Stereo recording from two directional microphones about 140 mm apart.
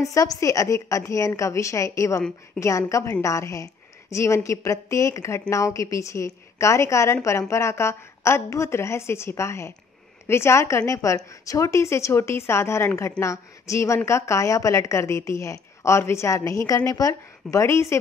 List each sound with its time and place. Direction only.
0.0 s a woman's voice: 25° left (ahead or behind)